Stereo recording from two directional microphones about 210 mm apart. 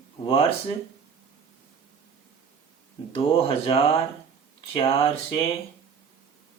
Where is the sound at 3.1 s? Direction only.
25° left (ahead or behind).